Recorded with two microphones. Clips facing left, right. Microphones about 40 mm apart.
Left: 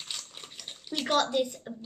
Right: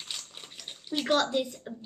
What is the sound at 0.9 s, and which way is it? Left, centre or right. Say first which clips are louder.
Speech: even; centre.